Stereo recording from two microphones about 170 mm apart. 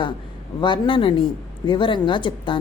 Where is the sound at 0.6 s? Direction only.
30° left (ahead or behind).